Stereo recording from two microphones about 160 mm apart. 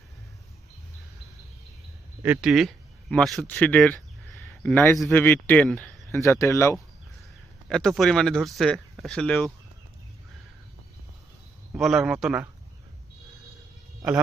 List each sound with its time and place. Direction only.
2.2 s speech: 10° right (ahead or behind); by 3.9 s 10° left (ahead or behind)
4.4 s a sound: 10° left (ahead or behind)
5.1 s speech: 10° left (ahead or behind)
6.2 s speech: 20° left (ahead or behind)
7.7 s speech: centre (ahead or behind)
11.8 s speech: centre (ahead or behind)